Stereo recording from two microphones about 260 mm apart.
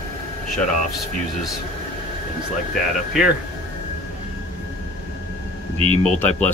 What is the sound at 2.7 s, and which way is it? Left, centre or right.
Speech, centre.